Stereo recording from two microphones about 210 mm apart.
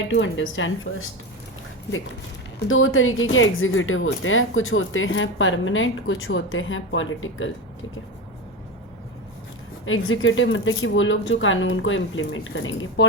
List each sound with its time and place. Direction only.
0.1 s speech: 60° left (ahead or behind)
2.6 s speech: 70° left (ahead or behind)
9.8 s speech: 70° left (ahead or behind)